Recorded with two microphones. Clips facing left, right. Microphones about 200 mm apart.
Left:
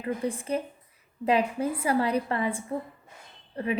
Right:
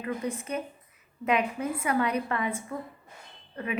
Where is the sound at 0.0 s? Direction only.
30° left (ahead or behind).